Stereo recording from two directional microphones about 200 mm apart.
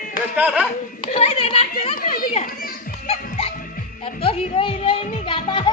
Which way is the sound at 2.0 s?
45° left (ahead or behind).